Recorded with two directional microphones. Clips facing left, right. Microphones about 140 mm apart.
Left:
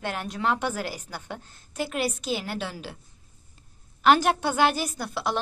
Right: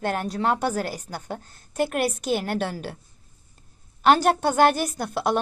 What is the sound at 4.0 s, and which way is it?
A woman's voice, 40° right (ahead or behind).